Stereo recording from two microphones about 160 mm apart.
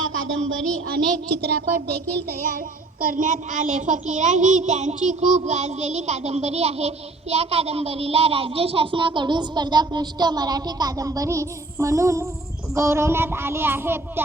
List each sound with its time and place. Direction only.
0.9 s a woman's voice: 90° right
3.0 s child singing: 55° right (ahead or behind); by 14.0 s 15° right (ahead or behind)